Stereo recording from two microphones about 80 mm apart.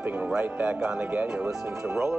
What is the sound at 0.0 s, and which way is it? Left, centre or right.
Speech, centre.